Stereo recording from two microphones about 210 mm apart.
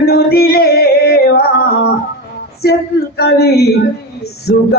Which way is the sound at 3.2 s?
50° left (ahead or behind).